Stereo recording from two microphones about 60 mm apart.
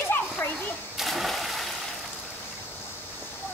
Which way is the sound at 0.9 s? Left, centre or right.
Centre.